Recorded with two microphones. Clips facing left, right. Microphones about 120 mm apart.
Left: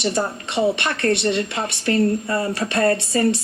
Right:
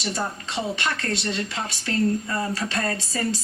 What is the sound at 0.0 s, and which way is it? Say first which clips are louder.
A woman's voice: left 6 dB; 65° left (ahead or behind).